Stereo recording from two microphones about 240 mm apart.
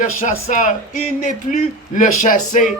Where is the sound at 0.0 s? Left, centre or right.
Left.